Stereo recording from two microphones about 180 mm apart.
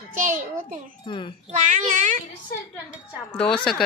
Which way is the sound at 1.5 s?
45° right (ahead or behind).